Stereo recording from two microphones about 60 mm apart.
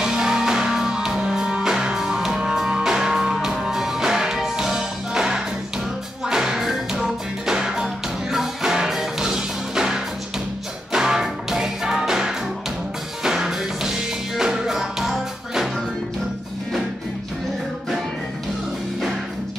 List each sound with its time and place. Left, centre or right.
0.0 s music: centre